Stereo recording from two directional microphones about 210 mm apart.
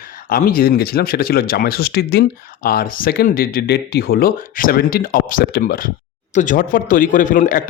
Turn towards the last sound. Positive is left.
turn(degrees=40)  # may be behind; listen again after turning